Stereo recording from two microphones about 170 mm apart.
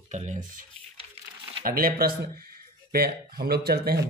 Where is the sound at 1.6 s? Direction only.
60° right (ahead or behind).